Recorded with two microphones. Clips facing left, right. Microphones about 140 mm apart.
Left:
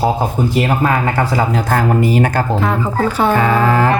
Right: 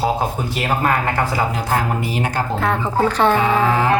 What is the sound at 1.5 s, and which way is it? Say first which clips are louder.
Speech: left 5 dB; 45° left (ahead or behind).